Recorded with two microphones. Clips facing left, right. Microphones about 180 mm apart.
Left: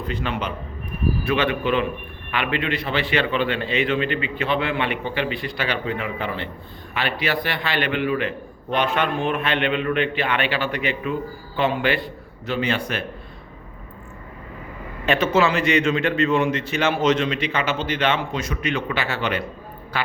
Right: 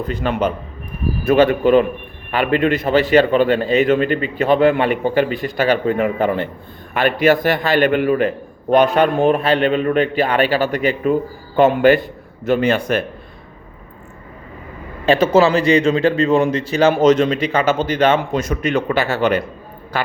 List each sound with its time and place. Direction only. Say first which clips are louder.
0.0 s a man's voice: right 7 dB; 45° right (ahead or behind)
15.0 s a man's voice: right 6 dB; 35° right (ahead or behind)